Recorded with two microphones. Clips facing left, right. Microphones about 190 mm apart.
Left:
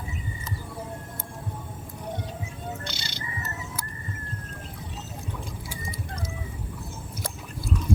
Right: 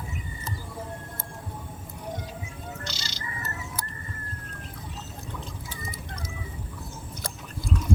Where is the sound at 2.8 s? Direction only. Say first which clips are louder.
Left 1 dB; 60° left (ahead or behind).